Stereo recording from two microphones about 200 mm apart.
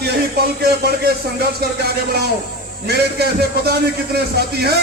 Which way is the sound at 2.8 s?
55° right (ahead or behind).